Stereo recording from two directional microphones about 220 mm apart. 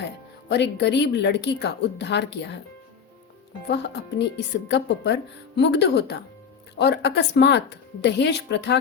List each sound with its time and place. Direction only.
0.4 s speech: 50° left (ahead or behind)
3.7 s speech: 50° left (ahead or behind)